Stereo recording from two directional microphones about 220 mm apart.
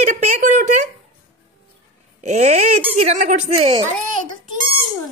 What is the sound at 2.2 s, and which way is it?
A woman's voice, 30° right (ahead or behind).